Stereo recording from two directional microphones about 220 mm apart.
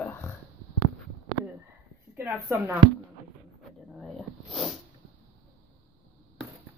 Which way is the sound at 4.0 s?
Centre (ahead or behind).